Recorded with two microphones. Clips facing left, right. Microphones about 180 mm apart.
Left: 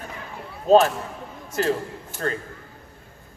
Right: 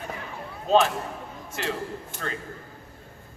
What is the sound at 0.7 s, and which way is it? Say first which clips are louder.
A man's voice: left 5 dB; 40° left (ahead or behind).